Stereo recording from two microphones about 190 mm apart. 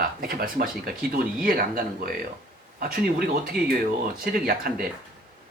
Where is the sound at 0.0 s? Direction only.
50° right (ahead or behind).